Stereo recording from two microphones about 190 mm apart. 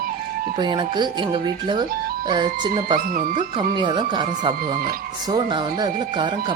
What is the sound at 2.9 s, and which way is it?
Speech, 45° right (ahead or behind).